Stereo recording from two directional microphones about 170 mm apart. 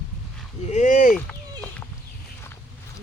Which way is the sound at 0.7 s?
50° left (ahead or behind).